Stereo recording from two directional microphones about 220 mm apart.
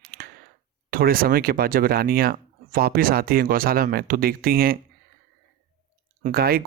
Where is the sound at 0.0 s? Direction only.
40° right (ahead or behind).